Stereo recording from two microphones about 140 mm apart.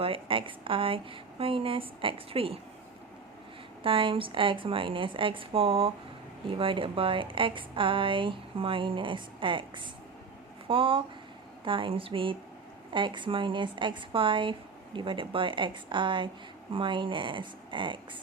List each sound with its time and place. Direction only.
0.0 s speech: 40° right (ahead or behind)
3.8 s speech: 40° right (ahead or behind)